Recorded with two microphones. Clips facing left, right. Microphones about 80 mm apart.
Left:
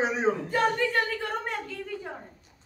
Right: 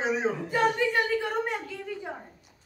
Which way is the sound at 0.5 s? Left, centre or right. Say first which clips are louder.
Even; centre.